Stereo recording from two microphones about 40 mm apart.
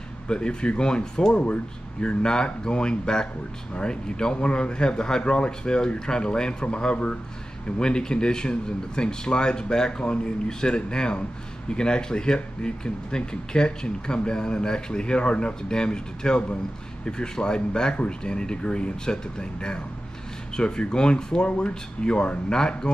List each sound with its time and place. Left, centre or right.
0.3 s speech: left
1.3 s speech: left